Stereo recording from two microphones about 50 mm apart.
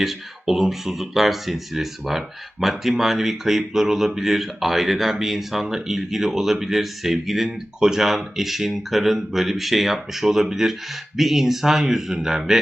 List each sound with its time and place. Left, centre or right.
0.0 s speech: centre